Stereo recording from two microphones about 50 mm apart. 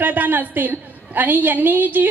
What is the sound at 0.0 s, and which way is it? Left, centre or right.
A woman's voice, right.